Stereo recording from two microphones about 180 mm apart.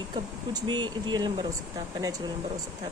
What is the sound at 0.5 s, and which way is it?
Speech, 25° right (ahead or behind).